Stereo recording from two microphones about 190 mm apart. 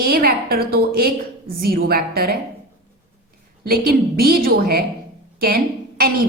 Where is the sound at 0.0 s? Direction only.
50° right (ahead or behind).